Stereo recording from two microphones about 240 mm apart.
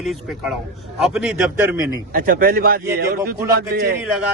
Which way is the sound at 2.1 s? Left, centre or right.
Right.